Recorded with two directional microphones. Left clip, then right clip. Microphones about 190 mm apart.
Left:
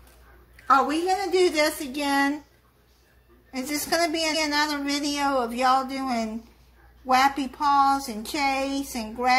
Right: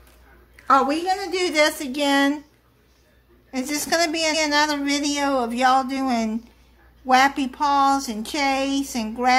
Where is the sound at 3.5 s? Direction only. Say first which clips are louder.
Right 3 dB; 40° right (ahead or behind).